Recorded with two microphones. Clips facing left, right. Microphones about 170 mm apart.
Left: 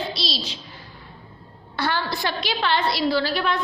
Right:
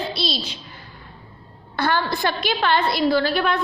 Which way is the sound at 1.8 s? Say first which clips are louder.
Right 3 dB; 50° right (ahead or behind).